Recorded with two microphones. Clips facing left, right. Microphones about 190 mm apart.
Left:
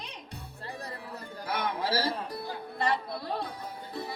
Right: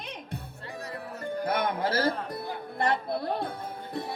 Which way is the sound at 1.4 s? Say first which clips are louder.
Right 3 dB; 50° right (ahead or behind).